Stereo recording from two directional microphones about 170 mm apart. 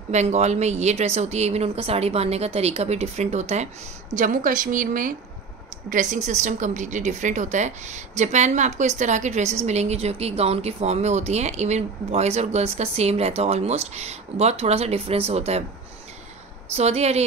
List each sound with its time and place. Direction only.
0.1 s a woman's voice: 40° right (ahead or behind)
16.7 s speech: 40° right (ahead or behind)